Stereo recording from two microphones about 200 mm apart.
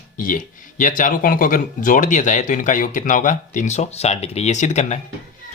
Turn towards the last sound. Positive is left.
turn(degrees=35)  # may be behind; listen again after turning